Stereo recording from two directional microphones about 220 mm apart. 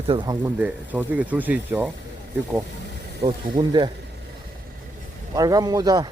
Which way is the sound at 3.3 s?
20° right (ahead or behind).